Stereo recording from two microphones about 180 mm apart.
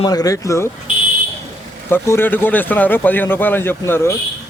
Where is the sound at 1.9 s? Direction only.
10° left (ahead or behind).